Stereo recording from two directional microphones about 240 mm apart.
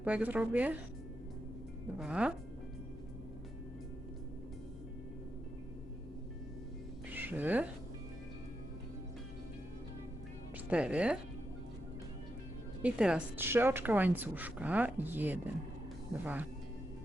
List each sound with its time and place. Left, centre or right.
0.0 s a woman's voice: centre
2.0 s speech: centre
7.1 s speech: centre
10.7 s speech: centre
12.8 s a woman's voice: centre